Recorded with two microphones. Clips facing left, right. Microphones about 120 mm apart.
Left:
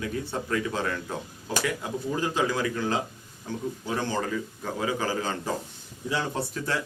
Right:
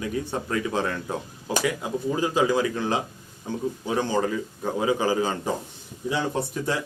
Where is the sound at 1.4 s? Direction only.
15° right (ahead or behind).